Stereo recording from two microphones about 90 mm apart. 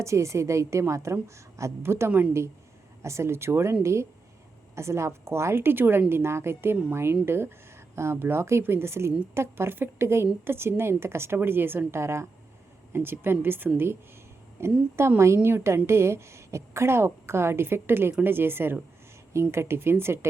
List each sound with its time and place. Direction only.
0.0 s a woman's voice: 35° right (ahead or behind)